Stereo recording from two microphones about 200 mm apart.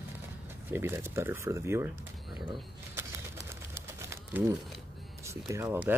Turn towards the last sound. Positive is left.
turn(degrees=-10)  # may be behind; listen again after turning